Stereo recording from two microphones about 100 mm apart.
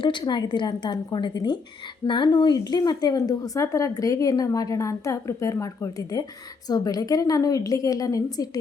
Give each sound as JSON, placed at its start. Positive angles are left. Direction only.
{"t": 0.0, "sound": "a woman's voice", "side_deg": 50}